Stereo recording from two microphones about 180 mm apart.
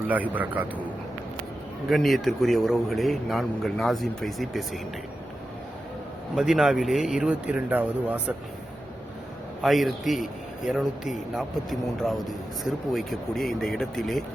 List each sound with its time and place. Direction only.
0.1 s speech: 10° right (ahead or behind)
1.9 s a man's voice: centre (ahead or behind)
6.3 s a man's voice: 5° right (ahead or behind)
9.6 s a man's voice: centre (ahead or behind)